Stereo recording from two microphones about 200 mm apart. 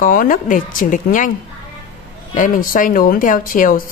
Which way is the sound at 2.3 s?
45° left (ahead or behind).